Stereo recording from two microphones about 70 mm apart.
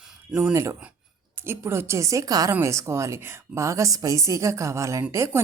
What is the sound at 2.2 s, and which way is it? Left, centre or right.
Speech, right.